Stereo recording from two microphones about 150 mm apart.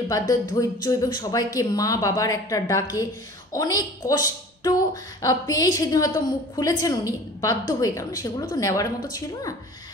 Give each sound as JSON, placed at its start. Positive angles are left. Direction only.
{"t": 0.3, "sound": "a woman's voice", "side_deg": 25}